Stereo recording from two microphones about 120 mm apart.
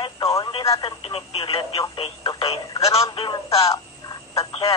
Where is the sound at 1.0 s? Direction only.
50° left (ahead or behind).